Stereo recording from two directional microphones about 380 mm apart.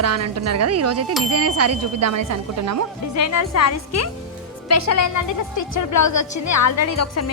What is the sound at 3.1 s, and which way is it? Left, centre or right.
A woman's voice, left.